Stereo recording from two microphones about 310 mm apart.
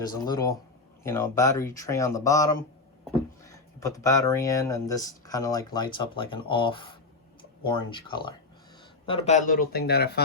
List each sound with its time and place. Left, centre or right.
0.0 s speech: centre; by 10.2 s left